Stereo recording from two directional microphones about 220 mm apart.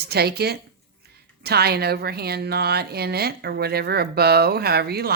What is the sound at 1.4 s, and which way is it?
A woman's voice, 45° right (ahead or behind).